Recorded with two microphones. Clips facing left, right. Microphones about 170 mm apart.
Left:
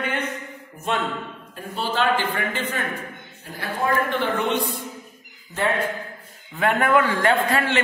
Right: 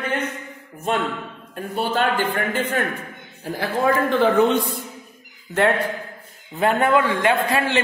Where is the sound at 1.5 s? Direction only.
55° right (ahead or behind).